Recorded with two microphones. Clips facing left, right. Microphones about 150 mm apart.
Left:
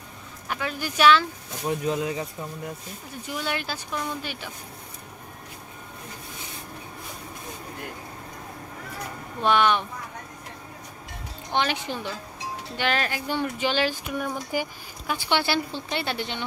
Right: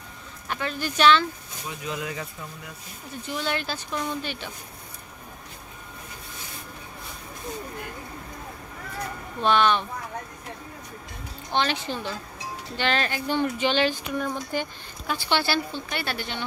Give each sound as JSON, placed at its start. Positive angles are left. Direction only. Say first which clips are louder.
{"t": 0.5, "sound": "speech", "louder": "right 1 dB", "side_deg": 10}
{"t": 1.9, "sound": "a woman's voice", "louder": "left 3 dB", "side_deg": 25}
{"t": 3.3, "sound": "speech", "louder": "right 1 dB", "side_deg": 10}
{"t": 9.4, "sound": "speech", "louder": "even", "side_deg": 10}
{"t": 11.5, "sound": "a woman's voice", "louder": "even", "side_deg": 15}